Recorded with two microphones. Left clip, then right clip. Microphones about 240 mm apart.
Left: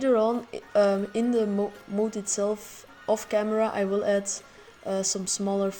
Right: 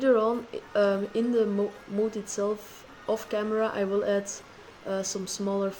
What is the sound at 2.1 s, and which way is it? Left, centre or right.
A woman's voice, left.